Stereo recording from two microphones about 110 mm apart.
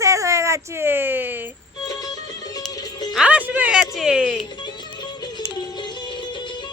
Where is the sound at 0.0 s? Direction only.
30° right (ahead or behind).